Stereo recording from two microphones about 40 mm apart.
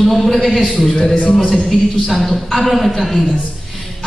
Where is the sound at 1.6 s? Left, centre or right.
Centre.